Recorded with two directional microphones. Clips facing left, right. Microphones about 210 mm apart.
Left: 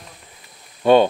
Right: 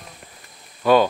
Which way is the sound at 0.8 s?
25° left (ahead or behind).